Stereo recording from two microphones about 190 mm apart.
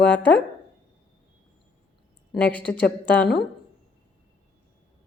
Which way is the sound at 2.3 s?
5° left (ahead or behind).